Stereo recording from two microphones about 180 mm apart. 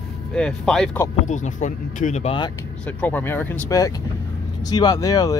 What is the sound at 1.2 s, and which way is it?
Speech, 40° left (ahead or behind).